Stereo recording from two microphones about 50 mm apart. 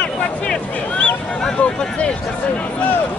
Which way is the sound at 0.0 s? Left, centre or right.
Left.